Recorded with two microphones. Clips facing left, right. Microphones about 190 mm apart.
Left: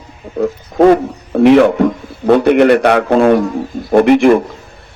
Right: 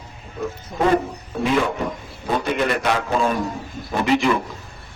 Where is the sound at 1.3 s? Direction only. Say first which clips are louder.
Left 14 dB; 70° left (ahead or behind).